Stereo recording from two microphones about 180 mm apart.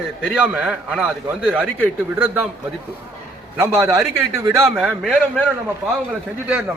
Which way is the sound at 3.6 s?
15° right (ahead or behind).